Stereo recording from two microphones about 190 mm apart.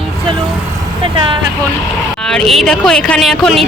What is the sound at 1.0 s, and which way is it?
Speech, 25° right (ahead or behind).